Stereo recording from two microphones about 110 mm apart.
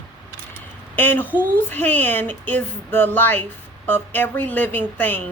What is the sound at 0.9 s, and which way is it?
Speech, 15° left (ahead or behind).